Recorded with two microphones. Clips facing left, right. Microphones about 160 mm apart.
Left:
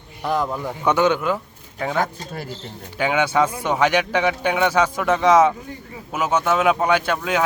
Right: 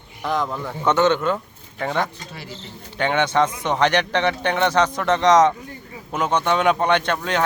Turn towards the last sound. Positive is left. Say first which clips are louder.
# left 1 dB
turn(degrees=5)  # may be behind; listen again after turning